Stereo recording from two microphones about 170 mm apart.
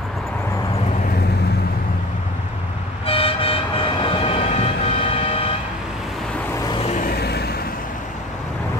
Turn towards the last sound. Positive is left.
turn(degrees=70)  # may be behind; listen again after turning